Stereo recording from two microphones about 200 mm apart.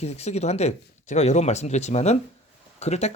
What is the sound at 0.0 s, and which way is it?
Speech, 35° left (ahead or behind).